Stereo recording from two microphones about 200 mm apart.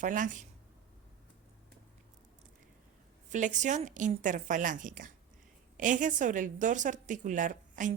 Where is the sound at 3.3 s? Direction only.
40° right (ahead or behind).